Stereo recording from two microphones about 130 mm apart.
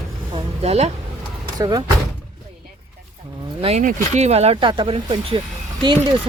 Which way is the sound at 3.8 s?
80° right.